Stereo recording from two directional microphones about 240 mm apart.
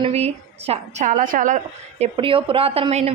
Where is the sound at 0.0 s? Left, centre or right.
Right.